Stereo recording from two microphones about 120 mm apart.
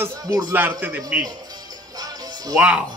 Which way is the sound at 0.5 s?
15° right (ahead or behind).